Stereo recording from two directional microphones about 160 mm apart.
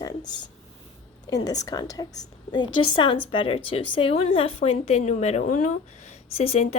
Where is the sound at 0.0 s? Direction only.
25° left (ahead or behind).